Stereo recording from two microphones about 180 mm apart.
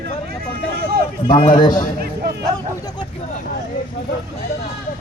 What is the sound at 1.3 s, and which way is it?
Speech, 50° left (ahead or behind).